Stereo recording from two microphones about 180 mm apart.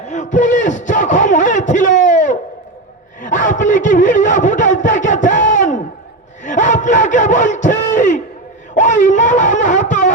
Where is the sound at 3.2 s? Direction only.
45° left (ahead or behind).